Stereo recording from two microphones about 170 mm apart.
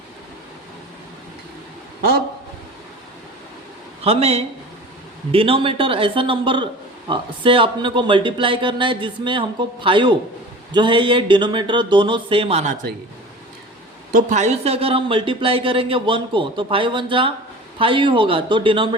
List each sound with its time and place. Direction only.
4.0 s speech: 35° right (ahead or behind)
14.1 s speech: 50° right (ahead or behind); by 18.9 s 30° right (ahead or behind)